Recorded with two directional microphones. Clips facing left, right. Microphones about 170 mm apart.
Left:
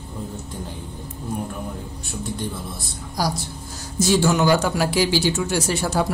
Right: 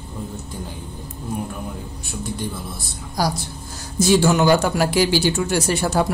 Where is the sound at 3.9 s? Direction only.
55° right (ahead or behind).